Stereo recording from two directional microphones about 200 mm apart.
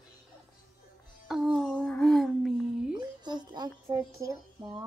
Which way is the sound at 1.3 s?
Centre (ahead or behind).